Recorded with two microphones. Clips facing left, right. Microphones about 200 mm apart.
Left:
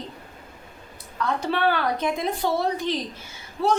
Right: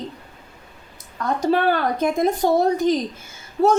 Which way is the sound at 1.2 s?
40° right (ahead or behind).